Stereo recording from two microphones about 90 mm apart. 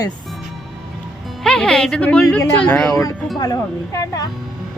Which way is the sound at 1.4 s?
5° left (ahead or behind).